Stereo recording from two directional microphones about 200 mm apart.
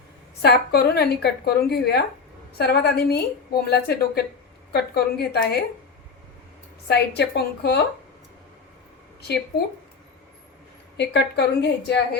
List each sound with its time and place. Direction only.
0.4 s a woman's voice: 55° left (ahead or behind)
6.8 s a woman's voice: 55° left (ahead or behind)
10.9 s a woman's voice: 60° left (ahead or behind)